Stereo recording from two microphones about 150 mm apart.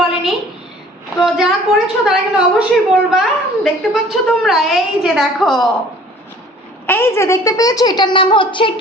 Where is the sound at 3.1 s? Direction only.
5° right (ahead or behind).